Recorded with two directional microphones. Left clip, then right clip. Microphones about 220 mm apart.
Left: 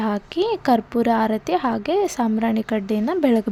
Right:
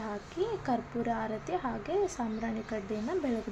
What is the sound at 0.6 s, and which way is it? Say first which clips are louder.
A woman's voice: left 14 dB; 45° left (ahead or behind).